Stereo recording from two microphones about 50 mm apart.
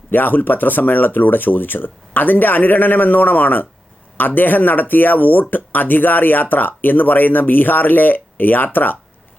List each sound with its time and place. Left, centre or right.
0.1 s speech: left